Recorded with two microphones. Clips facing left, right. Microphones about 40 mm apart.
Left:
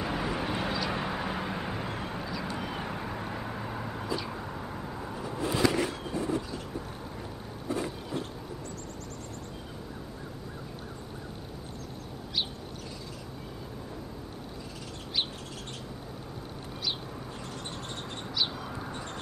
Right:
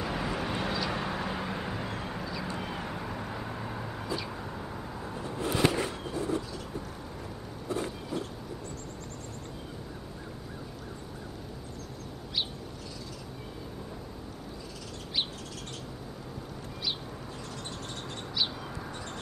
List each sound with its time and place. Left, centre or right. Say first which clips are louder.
0.0 s vehicle: left 1 dB; centre
2.7 s vehicle: left 1 dB; centre
5.7 s vehicle: left 2 dB; left
18.8 s vehicle: left 2 dB; left